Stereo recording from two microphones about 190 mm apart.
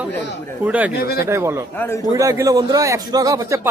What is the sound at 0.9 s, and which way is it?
Speech, 55° left (ahead or behind).